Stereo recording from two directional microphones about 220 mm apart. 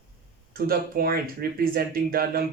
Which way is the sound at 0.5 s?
45° right (ahead or behind).